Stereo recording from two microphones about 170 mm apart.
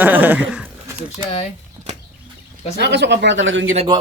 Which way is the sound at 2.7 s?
90° right.